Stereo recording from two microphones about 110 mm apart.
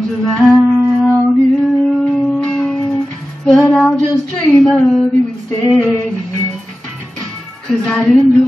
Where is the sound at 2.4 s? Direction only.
5° left (ahead or behind).